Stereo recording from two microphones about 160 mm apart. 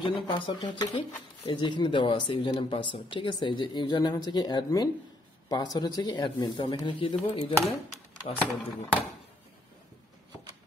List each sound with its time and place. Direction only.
0.0 s speech: 30° left (ahead or behind)
8.4 s speech: 10° left (ahead or behind)